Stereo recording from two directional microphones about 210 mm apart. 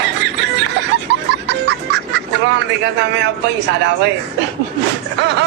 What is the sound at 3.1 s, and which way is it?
A man's voice, 55° right (ahead or behind).